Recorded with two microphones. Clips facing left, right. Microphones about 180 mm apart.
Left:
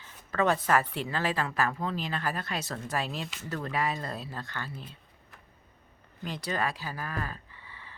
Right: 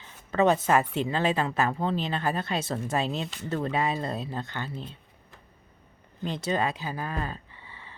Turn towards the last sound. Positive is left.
turn(degrees=-25)  # may be behind; listen again after turning